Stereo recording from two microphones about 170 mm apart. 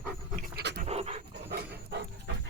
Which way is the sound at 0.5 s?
75° right (ahead or behind).